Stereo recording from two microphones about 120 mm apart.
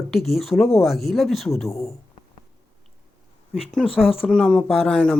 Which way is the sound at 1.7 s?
25° left (ahead or behind).